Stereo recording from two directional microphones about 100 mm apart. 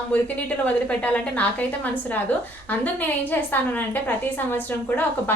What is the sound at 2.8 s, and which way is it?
A woman's voice, 15° left (ahead or behind).